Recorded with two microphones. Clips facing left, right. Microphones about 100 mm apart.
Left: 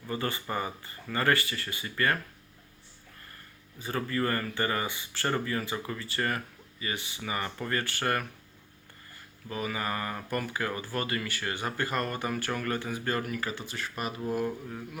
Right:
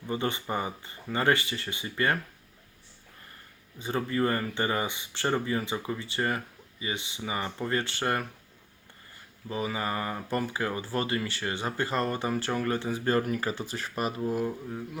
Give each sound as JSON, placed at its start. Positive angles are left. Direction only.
{"t": 0.1, "sound": "speech", "side_deg": -20}
{"t": 3.8, "sound": "speech", "side_deg": -20}
{"t": 9.5, "sound": "speech", "side_deg": -20}